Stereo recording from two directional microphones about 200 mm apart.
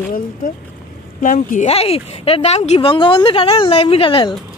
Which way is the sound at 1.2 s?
40° left (ahead or behind).